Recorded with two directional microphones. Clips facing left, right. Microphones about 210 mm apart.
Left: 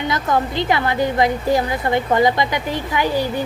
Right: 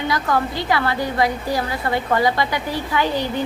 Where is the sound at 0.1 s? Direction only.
20° left (ahead or behind).